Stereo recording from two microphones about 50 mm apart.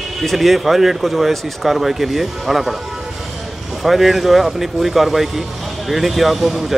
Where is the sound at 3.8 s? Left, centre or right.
Centre.